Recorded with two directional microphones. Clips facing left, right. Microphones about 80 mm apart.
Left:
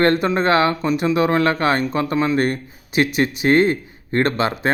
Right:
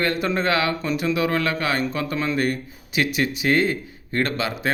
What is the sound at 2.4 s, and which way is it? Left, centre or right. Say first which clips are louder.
A man's voice: left 3 dB; left.